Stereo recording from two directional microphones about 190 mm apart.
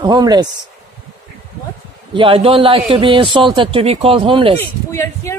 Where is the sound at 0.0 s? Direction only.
20° right (ahead or behind).